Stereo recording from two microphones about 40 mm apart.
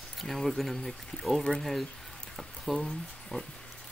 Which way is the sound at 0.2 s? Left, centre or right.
Centre.